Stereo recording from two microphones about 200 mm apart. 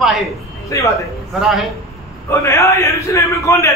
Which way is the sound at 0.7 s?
15° left (ahead or behind).